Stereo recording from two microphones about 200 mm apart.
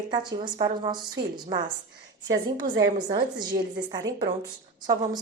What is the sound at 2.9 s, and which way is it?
A woman's voice, 20° right (ahead or behind).